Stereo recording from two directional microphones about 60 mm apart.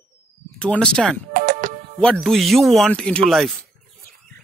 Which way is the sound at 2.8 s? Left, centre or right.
Centre.